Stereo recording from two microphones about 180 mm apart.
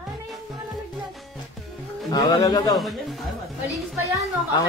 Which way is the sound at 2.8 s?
Centre (ahead or behind).